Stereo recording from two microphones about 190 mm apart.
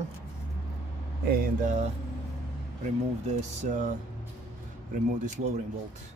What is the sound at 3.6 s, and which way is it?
Speech, 40° right (ahead or behind).